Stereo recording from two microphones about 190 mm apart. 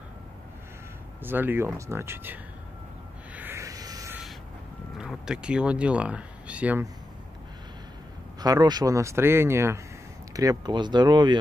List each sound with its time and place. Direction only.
1.2 s speech: 10° right (ahead or behind)
3.3 s vehicle: 15° right (ahead or behind)
4.9 s speech: 5° right (ahead or behind)
8.4 s speech: 20° right (ahead or behind)